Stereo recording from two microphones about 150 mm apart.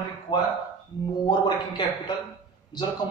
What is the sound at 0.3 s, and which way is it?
A man's voice, 25° left (ahead or behind).